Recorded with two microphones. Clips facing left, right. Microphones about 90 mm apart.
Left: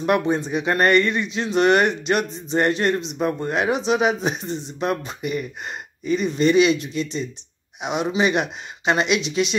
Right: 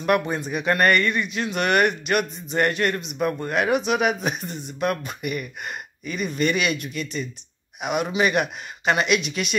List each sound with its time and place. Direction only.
0.0 s speech: 25° left (ahead or behind)